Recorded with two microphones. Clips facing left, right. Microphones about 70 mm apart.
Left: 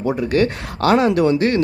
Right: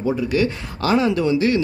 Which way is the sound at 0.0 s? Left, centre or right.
Left.